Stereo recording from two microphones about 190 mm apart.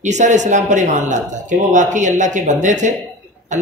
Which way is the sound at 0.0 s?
40° right (ahead or behind).